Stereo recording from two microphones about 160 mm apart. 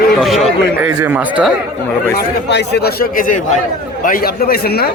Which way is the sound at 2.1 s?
90° left.